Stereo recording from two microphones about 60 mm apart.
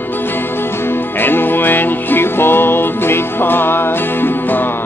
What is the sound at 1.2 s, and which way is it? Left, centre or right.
Music, left.